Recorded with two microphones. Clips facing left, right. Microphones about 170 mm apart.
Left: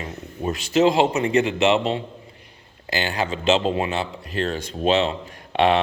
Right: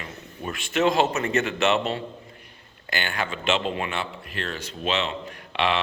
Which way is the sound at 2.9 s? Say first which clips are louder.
Left 5 dB; 25° left (ahead or behind).